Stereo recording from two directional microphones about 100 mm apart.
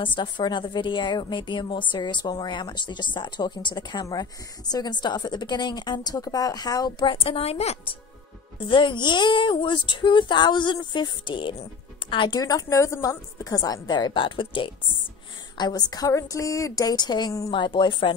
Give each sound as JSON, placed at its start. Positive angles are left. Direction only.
{"t": 0.0, "sound": "a woman's voice", "side_deg": 50}
{"t": 7.1, "sound": "a woman's voice", "side_deg": 70}
{"t": 8.5, "sound": "a woman's voice", "side_deg": 55}
{"t": 12.3, "sound": "a woman's voice", "side_deg": 40}
{"t": 15.5, "sound": "a woman's voice", "side_deg": 45}